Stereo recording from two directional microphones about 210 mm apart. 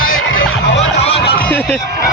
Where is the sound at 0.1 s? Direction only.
70° left (ahead or behind).